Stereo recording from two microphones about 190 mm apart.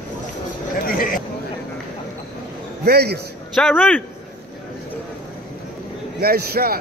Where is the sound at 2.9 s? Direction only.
55° right (ahead or behind).